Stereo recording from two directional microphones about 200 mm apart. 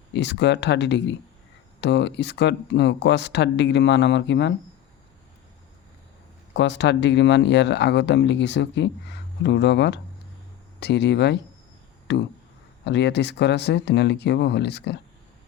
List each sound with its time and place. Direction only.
0.1 s speech: 60° left (ahead or behind)
6.5 s speech: 60° left (ahead or behind)